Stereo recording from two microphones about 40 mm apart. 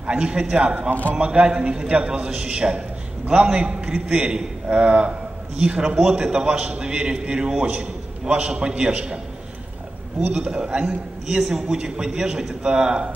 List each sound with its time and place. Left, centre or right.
0.0 s a man's voice: right
10.2 s a man's voice: right